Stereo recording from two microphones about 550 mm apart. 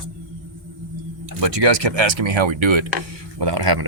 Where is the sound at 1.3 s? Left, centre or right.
Right.